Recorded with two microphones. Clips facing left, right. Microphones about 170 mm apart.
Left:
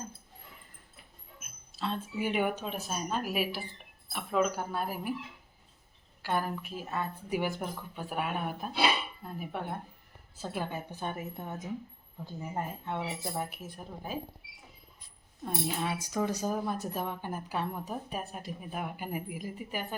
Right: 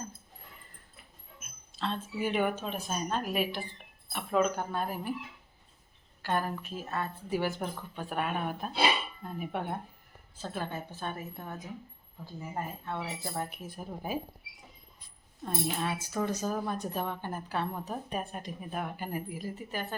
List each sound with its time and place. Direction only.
1.4 s speech: 10° left (ahead or behind)
6.2 s speech: 10° left (ahead or behind); by 14.2 s 5° right (ahead or behind)
15.4 s speech: 15° left (ahead or behind)